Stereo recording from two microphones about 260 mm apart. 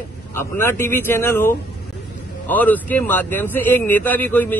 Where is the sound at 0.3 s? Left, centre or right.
Centre.